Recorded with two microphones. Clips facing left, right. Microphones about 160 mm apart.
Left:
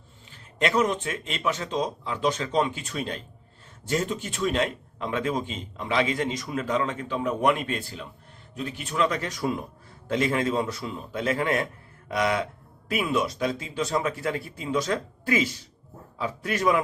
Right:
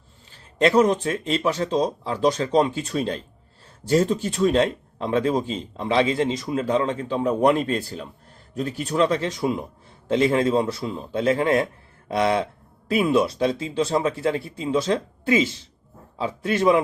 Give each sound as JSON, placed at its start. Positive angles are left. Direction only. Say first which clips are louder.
{"t": 0.3, "sound": "speech", "louder": "right 6 dB", "side_deg": -30}